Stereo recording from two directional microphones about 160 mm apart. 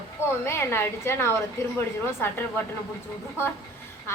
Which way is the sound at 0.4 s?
15° left (ahead or behind).